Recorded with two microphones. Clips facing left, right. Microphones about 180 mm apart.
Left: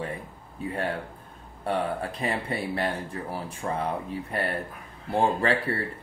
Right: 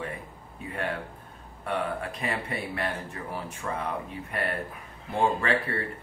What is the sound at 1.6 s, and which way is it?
Speech, 30° left (ahead or behind).